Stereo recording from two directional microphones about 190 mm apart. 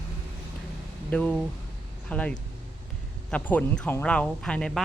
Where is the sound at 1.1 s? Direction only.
5° left (ahead or behind).